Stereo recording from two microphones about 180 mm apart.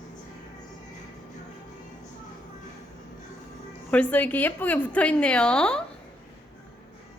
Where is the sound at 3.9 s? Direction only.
10° left (ahead or behind).